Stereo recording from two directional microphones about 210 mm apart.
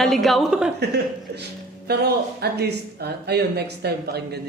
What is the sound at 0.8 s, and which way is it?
A man's voice, 50° right (ahead or behind).